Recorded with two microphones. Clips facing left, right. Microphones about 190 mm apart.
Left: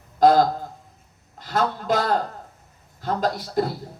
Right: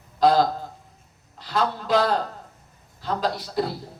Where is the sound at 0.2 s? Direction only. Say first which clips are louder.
Left 2 dB; 50° left (ahead or behind).